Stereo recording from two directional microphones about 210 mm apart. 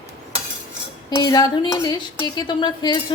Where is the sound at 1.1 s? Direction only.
20° left (ahead or behind).